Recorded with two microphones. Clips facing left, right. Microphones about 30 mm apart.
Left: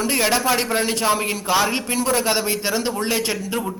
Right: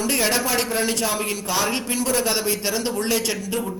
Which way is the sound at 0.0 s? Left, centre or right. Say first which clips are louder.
Left 2 dB; centre.